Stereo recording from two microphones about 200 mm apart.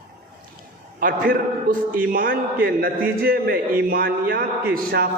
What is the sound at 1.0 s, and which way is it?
A man's voice, 45° right (ahead or behind).